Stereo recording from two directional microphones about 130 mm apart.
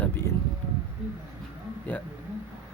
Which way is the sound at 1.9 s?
15° left (ahead or behind).